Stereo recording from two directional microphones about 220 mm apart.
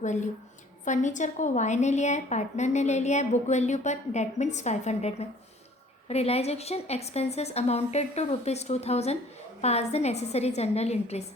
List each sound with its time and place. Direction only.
0.0 s a woman's voice: 35° left (ahead or behind)